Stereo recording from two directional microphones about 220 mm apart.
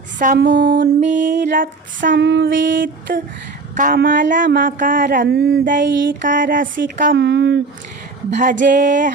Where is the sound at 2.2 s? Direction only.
50° right (ahead or behind).